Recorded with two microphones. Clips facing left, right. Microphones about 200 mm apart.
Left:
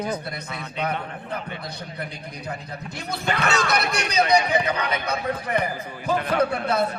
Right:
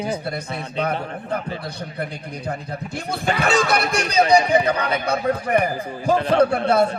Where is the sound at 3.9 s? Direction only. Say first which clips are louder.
Right 5 dB; 30° right (ahead or behind).